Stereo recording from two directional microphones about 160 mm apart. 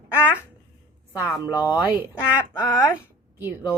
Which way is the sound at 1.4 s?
10° right (ahead or behind).